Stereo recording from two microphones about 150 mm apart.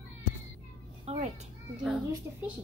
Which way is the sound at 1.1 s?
45° right (ahead or behind).